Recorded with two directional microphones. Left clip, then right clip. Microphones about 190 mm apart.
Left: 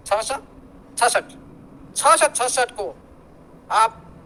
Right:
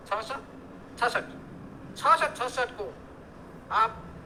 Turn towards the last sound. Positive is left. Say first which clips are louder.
# left 7 dB
turn(degrees=55)  # may be behind; listen again after turning